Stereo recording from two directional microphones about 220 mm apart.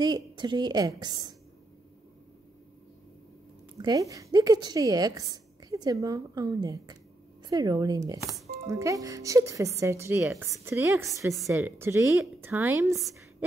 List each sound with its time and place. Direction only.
0.0 s a woman's voice: 20° right (ahead or behind)
3.8 s speech: 15° right (ahead or behind)